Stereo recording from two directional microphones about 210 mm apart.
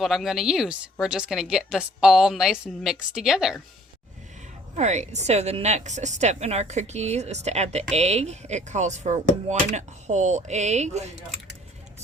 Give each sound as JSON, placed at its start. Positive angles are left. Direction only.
{"t": 0.0, "sound": "a woman's voice", "side_deg": 0}
{"t": 4.7, "sound": "speech", "side_deg": -35}